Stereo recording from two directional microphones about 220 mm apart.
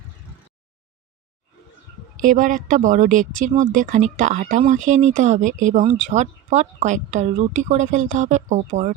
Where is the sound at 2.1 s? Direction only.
35° right (ahead or behind).